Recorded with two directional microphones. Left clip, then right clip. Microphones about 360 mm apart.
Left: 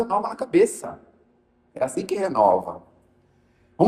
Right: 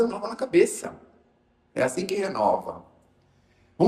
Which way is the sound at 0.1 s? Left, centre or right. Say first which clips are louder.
Left 4 dB; centre.